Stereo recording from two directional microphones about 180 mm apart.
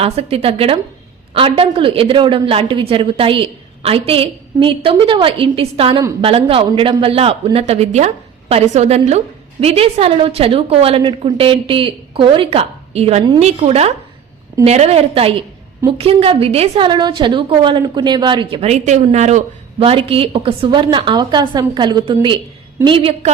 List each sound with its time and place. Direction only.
0.0 s a man's voice: 35° right (ahead or behind)